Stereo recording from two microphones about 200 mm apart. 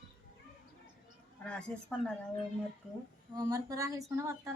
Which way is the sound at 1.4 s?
5° left (ahead or behind).